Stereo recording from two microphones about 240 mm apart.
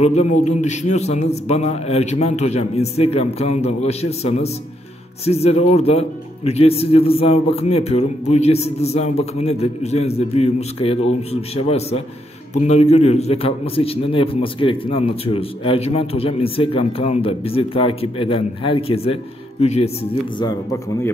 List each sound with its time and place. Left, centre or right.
0.0 s a man's voice: left